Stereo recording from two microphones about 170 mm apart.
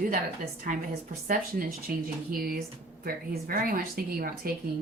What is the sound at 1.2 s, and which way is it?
Speech, 55° right (ahead or behind).